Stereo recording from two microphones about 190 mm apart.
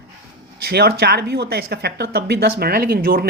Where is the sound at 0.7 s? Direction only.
60° right (ahead or behind).